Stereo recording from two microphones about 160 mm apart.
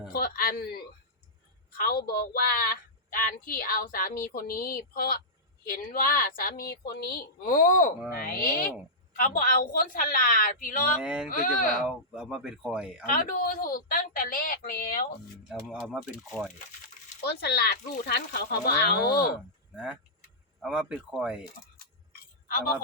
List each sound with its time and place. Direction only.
0.1 s a woman's voice: 65° left (ahead or behind)
8.2 s a woman's voice: 65° left (ahead or behind)
11.0 s speech: 5° right (ahead or behind)
11.3 s a woman's voice: 60° left (ahead or behind)
11.8 s speech: 5° right (ahead or behind)
13.1 s a woman's voice: 60° left (ahead or behind)
15.4 s speech: 5° right (ahead or behind)
17.2 s speech: 85° left
19.7 s speech: 5° right (ahead or behind)